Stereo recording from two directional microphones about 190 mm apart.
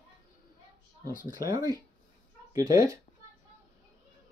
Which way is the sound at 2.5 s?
15° right (ahead or behind).